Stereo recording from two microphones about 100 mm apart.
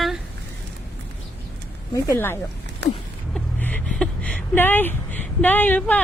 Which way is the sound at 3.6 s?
10° left (ahead or behind).